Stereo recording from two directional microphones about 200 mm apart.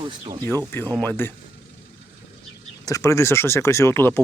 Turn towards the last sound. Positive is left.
turn(degrees=10)  # may be behind; listen again after turning